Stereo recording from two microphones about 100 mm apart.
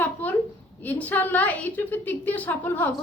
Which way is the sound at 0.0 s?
15° left (ahead or behind).